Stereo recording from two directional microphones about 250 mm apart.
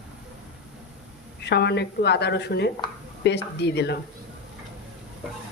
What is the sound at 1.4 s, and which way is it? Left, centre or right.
Speech, left.